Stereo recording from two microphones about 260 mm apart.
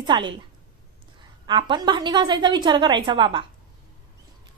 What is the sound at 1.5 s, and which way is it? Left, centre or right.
A woman's voice, centre.